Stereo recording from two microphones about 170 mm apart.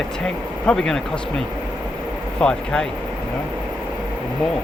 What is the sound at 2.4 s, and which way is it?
Speech, 5° left (ahead or behind).